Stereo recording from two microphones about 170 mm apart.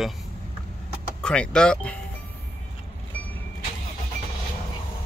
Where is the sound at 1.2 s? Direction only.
5° left (ahead or behind).